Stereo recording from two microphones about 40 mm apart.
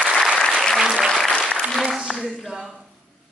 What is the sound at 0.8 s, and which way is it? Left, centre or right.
Applause, centre.